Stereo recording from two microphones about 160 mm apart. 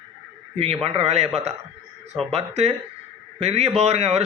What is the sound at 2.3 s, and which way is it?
A man's voice, 40° right (ahead or behind).